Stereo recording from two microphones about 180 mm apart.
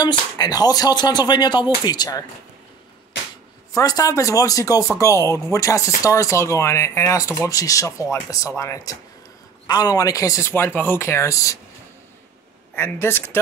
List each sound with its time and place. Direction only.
0.0 s speech: 25° left (ahead or behind)
3.7 s speech: 20° left (ahead or behind)
12.7 s speech: 10° left (ahead or behind)